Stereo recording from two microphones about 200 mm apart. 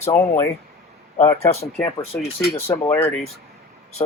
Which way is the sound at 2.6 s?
10° left (ahead or behind).